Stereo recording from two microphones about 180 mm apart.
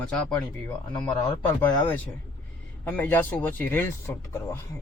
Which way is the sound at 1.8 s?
10° left (ahead or behind).